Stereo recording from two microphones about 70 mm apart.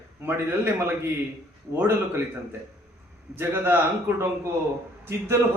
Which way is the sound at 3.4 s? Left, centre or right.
Right.